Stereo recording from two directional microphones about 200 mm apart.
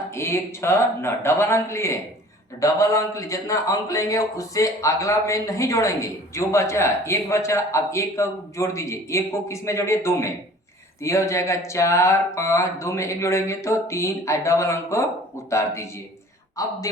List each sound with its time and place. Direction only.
0.2 s a man's voice: 15° left (ahead or behind)